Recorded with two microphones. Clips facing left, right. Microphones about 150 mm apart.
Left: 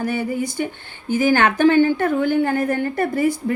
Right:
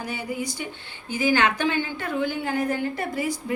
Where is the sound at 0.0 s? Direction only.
55° left (ahead or behind).